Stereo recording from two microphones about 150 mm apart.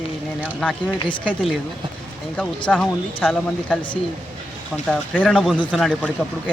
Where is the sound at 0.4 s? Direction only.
5° left (ahead or behind).